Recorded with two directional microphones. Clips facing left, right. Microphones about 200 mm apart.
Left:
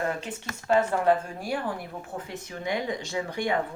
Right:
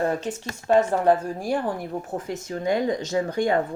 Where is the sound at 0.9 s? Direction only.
35° right (ahead or behind).